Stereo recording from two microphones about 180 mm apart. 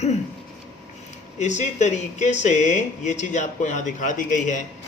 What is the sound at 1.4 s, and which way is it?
Speech, 40° left (ahead or behind).